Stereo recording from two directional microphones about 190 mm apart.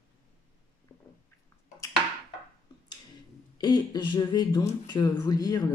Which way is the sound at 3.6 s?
20° left (ahead or behind).